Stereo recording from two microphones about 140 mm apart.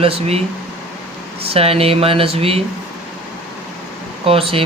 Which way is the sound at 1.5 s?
45° right (ahead or behind).